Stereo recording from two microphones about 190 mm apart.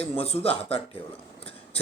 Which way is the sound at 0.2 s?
30° left (ahead or behind).